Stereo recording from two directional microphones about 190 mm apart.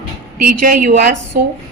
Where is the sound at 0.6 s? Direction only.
45° right (ahead or behind).